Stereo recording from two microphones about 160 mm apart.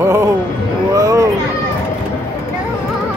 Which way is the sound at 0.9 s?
20° right (ahead or behind).